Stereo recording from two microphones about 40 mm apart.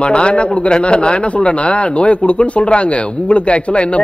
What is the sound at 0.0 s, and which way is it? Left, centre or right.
A man's voice, left.